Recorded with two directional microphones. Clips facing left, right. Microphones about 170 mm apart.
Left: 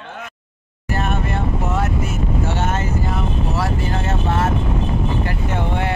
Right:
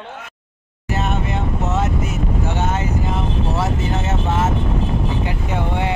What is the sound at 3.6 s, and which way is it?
Speech, 20° right (ahead or behind).